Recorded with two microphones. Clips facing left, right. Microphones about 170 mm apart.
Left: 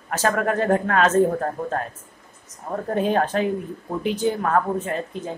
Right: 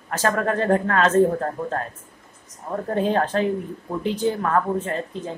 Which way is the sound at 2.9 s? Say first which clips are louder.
Even; 15° left (ahead or behind).